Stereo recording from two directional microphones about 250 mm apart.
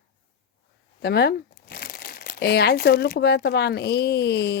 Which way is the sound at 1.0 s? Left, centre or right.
Left.